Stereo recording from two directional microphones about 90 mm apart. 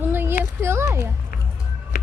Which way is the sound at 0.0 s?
25° right (ahead or behind).